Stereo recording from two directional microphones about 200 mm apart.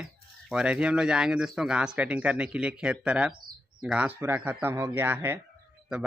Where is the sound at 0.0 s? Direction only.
5° right (ahead or behind).